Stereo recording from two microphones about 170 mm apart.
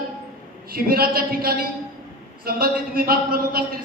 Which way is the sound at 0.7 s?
60° right (ahead or behind).